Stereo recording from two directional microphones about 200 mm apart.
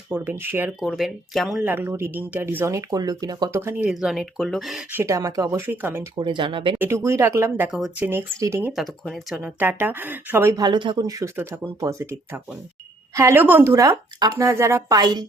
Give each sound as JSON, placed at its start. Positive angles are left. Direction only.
{"t": 0.1, "sound": "speech", "side_deg": -10}
{"t": 6.1, "sound": "speech", "side_deg": -25}
{"t": 6.7, "sound": "speech", "side_deg": -10}
{"t": 8.7, "sound": "speech", "side_deg": 0}